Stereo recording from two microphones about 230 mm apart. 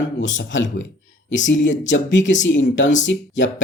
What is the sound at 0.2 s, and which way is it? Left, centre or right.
Speech, left.